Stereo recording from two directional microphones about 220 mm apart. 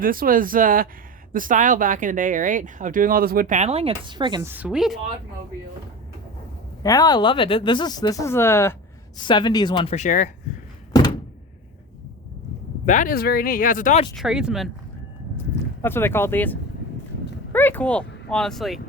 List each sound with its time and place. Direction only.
0.0 s speech: 40° right (ahead or behind); by 4.5 s 20° right (ahead or behind)
4.5 s speech: 5° right (ahead or behind)
6.8 s speech: 15° left (ahead or behind); by 10.3 s 35° left (ahead or behind)
12.8 s speech: 35° left (ahead or behind)
14.2 s speech: 5° right (ahead or behind)
15.8 s speech: 10° left (ahead or behind)